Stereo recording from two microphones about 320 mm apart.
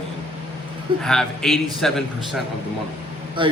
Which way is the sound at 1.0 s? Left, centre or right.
Centre.